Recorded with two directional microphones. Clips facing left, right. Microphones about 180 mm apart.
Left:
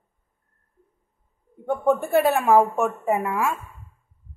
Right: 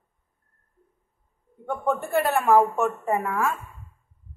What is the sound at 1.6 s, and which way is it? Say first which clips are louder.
A woman's voice: left 5 dB; 15° left (ahead or behind).